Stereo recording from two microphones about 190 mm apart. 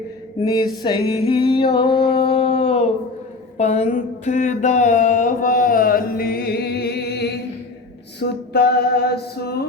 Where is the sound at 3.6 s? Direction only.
35° left (ahead or behind); by 7.3 s 60° left (ahead or behind).